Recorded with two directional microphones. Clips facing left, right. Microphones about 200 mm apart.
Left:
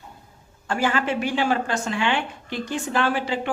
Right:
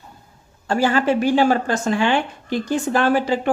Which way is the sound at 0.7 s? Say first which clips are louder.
Right 5 dB; 35° right (ahead or behind).